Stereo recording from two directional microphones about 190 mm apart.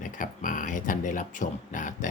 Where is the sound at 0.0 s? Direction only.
45° left (ahead or behind).